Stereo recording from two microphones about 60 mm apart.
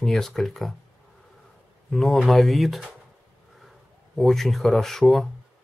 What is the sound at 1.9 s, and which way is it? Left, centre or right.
Speech, centre.